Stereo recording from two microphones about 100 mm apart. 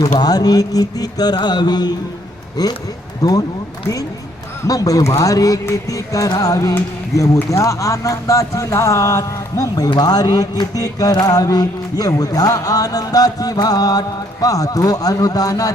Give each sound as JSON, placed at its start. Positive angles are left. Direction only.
{"t": 0.0, "sound": "speech", "side_deg": 40}
{"t": 4.6, "sound": "speech", "side_deg": 35}